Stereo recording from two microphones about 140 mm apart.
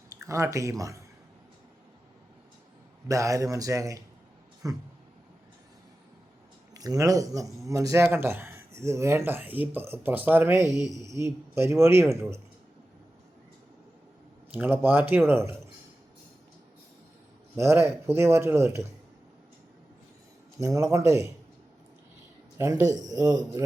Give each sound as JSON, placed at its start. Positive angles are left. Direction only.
{"t": 0.1, "sound": "speech", "side_deg": -20}
{"t": 3.1, "sound": "speech", "side_deg": -20}
{"t": 6.7, "sound": "speech", "side_deg": -25}
{"t": 10.7, "sound": "speech", "side_deg": 25}
{"t": 11.1, "sound": "speech", "side_deg": -20}
{"t": 14.5, "sound": "speech", "side_deg": -15}
{"t": 17.6, "sound": "speech", "side_deg": -20}
{"t": 20.6, "sound": "speech", "side_deg": -20}
{"t": 22.5, "sound": "speech", "side_deg": -25}